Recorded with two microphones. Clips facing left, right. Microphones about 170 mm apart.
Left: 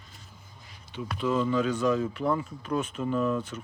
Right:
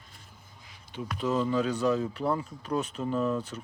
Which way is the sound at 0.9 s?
40° right (ahead or behind).